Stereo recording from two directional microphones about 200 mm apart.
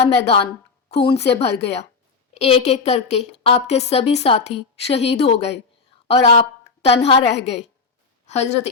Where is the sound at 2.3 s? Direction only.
30° left (ahead or behind).